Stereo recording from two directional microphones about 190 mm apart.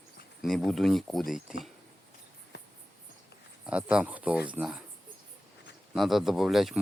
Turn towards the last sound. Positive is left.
turn(degrees=0)  # may be behind; listen again after turning